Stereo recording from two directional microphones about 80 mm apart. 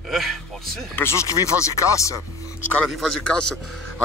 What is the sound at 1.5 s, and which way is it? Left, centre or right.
Speech, left.